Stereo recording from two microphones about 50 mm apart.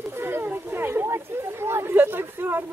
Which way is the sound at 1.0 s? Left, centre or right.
Right.